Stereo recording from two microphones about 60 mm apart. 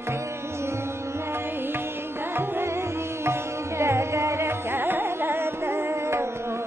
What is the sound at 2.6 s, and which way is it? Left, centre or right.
Music, right.